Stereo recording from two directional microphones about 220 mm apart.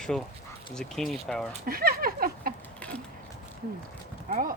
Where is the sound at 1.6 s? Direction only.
40° right (ahead or behind).